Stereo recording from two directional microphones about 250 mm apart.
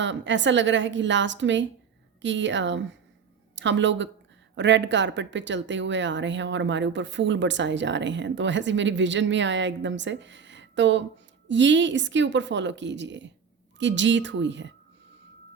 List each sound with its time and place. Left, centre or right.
0.0 s speech: right